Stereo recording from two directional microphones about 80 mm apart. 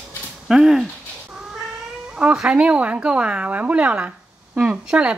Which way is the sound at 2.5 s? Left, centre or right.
Centre.